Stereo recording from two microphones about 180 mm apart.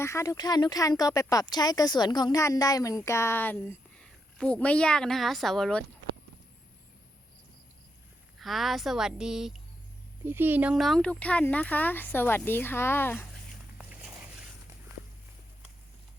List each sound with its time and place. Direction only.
0.0 s a woman's voice: 15° left (ahead or behind)
8.4 s a woman's voice: centre (ahead or behind)
13.7 s boat: 5° right (ahead or behind)